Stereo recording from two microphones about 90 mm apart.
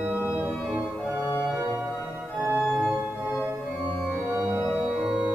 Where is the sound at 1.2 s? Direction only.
25° left (ahead or behind).